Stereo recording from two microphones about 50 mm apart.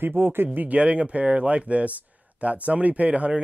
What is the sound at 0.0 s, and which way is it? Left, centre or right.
Speech, right.